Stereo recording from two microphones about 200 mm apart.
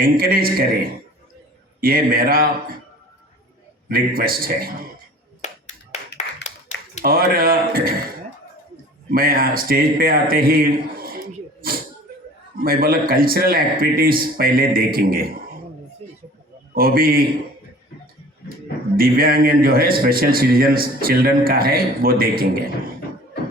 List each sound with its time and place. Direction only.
0.0 s a man's voice: 45° right (ahead or behind)
3.8 s a man's voice: 45° right (ahead or behind)
5.4 s finger snapping: 35° left (ahead or behind)
7.0 s a man's voice: 50° right (ahead or behind)
9.0 s a man's voice: 45° right (ahead or behind)
12.5 s a man's voice: 45° right (ahead or behind)
16.7 s a man's voice: 45° right (ahead or behind)
18.9 s a man's voice: 45° right (ahead or behind)